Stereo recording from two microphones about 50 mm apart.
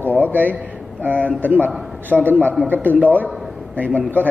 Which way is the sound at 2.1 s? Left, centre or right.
Centre.